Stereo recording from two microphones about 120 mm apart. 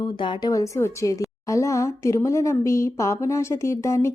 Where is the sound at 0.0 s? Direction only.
40° left (ahead or behind).